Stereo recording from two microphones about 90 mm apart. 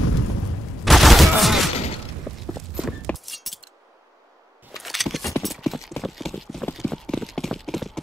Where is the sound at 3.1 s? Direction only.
15° left (ahead or behind).